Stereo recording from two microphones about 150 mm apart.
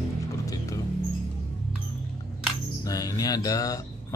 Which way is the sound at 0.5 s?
20° left (ahead or behind).